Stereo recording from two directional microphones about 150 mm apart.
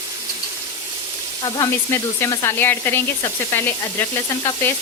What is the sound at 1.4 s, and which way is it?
Frying, 30° left (ahead or behind).